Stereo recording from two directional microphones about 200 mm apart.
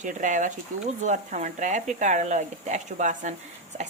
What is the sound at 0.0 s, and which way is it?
A woman's voice, 40° right (ahead or behind).